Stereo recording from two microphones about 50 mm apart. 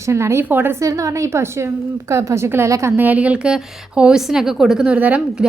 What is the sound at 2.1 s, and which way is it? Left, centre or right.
Speech, right.